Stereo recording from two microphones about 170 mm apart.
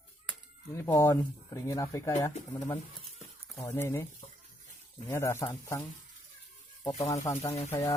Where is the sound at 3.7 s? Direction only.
15° left (ahead or behind).